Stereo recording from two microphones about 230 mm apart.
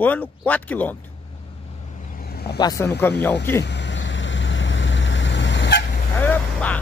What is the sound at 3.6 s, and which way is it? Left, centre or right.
Vehicle, left.